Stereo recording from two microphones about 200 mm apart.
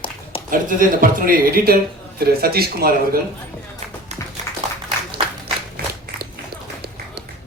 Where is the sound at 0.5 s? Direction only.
45° right (ahead or behind).